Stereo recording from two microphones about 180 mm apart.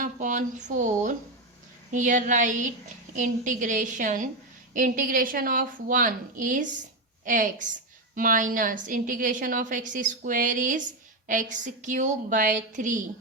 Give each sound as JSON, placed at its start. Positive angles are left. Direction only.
{"t": 0.0, "sound": "a woman's voice", "side_deg": -45}